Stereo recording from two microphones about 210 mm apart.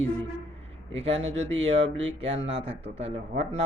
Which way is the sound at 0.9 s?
30° right (ahead or behind).